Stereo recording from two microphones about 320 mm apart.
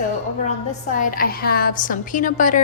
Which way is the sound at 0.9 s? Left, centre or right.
Left.